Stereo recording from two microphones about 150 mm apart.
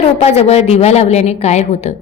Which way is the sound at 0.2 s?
45° left (ahead or behind).